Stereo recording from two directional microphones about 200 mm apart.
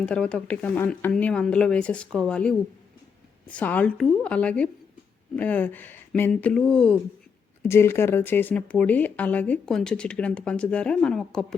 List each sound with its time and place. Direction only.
0.0 s speech: 5° left (ahead or behind)